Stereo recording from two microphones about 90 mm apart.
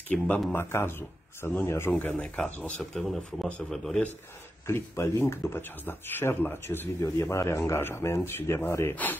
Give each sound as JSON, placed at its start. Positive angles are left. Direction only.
{"t": 0.1, "sound": "speech", "side_deg": 5}
{"t": 0.5, "sound": "speech", "side_deg": 25}
{"t": 4.6, "sound": "speech", "side_deg": 30}